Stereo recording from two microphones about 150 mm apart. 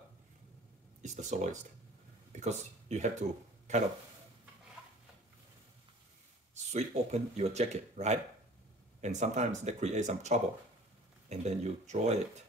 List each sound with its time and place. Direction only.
1.0 s speech: 55° right (ahead or behind)
4.8 s a sound: 10° right (ahead or behind)
6.5 s speech: 50° right (ahead or behind)